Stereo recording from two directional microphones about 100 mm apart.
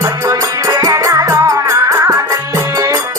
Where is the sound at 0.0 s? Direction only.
30° right (ahead or behind).